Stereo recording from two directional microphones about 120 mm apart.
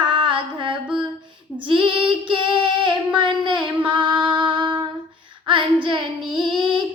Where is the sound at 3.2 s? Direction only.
40° right (ahead or behind).